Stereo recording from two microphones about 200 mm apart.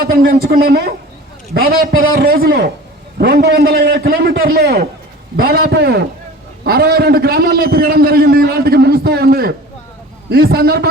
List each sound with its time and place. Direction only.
0.0 s a man's voice: 50° right (ahead or behind)